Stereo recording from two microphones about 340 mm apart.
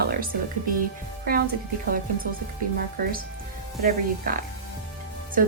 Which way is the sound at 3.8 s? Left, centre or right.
Right.